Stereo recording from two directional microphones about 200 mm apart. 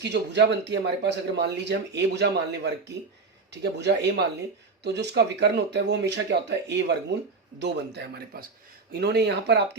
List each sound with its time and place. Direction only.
0.0 s a man's voice: 60° right (ahead or behind)